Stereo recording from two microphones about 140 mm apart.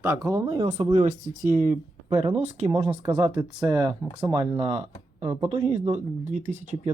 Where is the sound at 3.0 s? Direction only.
25° right (ahead or behind).